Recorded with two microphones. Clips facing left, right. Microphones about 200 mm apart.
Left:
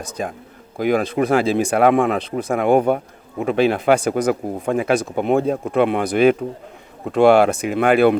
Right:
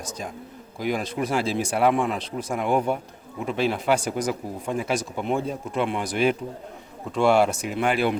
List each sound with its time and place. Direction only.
0.8 s speech: 60° left (ahead or behind)